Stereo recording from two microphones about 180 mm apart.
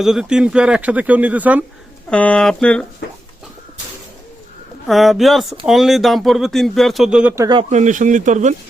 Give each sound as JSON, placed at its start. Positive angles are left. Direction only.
{"t": 0.0, "sound": "speech", "side_deg": -5}
{"t": 2.0, "sound": "speech", "side_deg": 5}
{"t": 4.9, "sound": "speech", "side_deg": 0}
{"t": 7.7, "sound": "speech", "side_deg": -40}